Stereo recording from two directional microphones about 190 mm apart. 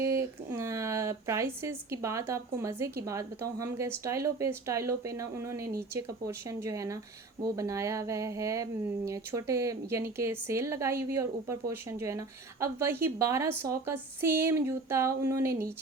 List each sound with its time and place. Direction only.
0.0 s speech: 15° right (ahead or behind)